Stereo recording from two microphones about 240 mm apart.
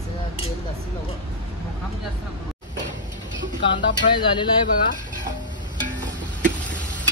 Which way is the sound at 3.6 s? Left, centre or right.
Centre.